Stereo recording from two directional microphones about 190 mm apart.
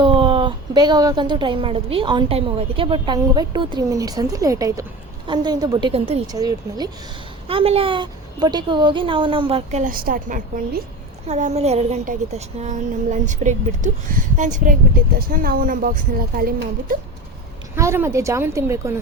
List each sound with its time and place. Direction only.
0.0 s a woman's voice: 25° right (ahead or behind)
6.2 s a woman's voice: 20° right (ahead or behind)
7.4 s a woman's voice: 30° right (ahead or behind)
9.8 s a woman's voice: 50° right (ahead or behind)
11.3 s a woman's voice: 40° right (ahead or behind)
17.7 s a woman's voice: 15° right (ahead or behind)